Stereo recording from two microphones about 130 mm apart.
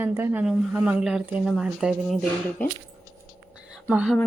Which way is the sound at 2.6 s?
15° left (ahead or behind).